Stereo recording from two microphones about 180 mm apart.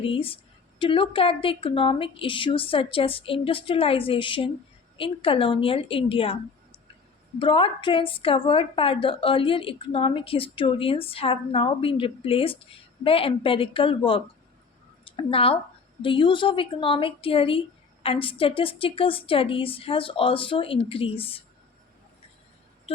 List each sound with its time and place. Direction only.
0.0 s a woman's voice: 30° left (ahead or behind)